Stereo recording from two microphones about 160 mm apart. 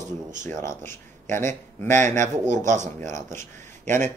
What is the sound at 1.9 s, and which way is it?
Speech, 50° right (ahead or behind).